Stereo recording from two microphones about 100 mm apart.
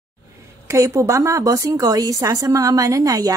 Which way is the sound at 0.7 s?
30° right (ahead or behind).